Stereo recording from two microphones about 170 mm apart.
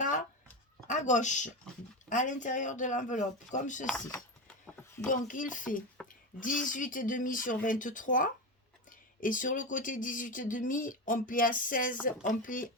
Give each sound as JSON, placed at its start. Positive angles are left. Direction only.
{"t": 0.9, "sound": "a woman's voice", "side_deg": 45}
{"t": 4.4, "sound": "a sound", "side_deg": 5}
{"t": 5.0, "sound": "speech", "side_deg": 50}